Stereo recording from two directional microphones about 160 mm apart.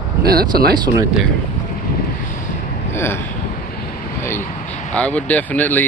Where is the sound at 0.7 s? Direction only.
25° right (ahead or behind).